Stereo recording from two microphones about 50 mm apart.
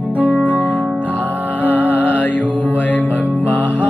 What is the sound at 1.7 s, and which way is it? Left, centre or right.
Music, left.